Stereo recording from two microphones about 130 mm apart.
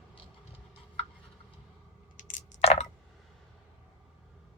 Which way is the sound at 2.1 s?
75° left (ahead or behind).